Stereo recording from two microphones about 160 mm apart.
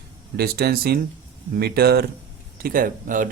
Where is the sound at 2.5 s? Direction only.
65° right (ahead or behind).